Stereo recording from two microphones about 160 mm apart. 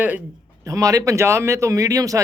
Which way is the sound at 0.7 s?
20° right (ahead or behind).